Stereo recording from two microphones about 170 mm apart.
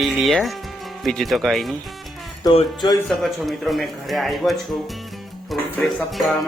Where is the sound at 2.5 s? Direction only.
25° left (ahead or behind).